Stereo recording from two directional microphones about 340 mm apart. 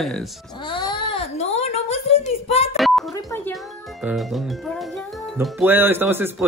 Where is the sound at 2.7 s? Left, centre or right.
Centre.